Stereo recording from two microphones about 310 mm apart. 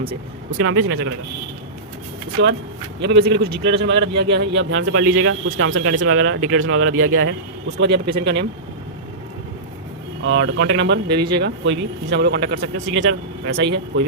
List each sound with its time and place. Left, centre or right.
0.6 s speech: right
2.4 s speech: right
10.2 s speech: right